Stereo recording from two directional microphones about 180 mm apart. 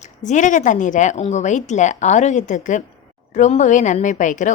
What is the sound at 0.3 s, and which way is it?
Speech, 45° left (ahead or behind).